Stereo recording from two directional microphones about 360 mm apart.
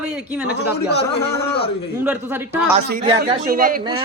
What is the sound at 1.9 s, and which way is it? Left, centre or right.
Speech, centre.